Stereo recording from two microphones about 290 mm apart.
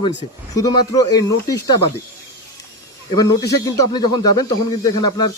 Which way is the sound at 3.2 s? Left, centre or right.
Centre.